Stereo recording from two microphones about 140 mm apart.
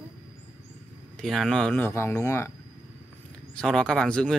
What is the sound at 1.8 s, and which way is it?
Speech, 20° left (ahead or behind).